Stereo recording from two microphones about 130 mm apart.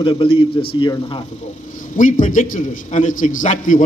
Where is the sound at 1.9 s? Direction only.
85° left.